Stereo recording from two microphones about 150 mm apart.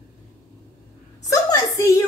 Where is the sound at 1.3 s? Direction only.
20° left (ahead or behind).